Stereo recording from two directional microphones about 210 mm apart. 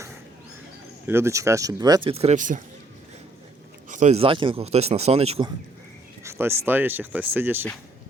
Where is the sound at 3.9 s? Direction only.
35° right (ahead or behind).